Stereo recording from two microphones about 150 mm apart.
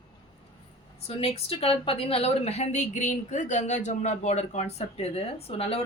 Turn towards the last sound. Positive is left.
turn(degrees=40)  # may be behind; listen again after turning